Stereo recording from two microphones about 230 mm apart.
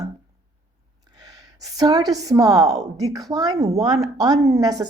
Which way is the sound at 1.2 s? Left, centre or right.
Centre.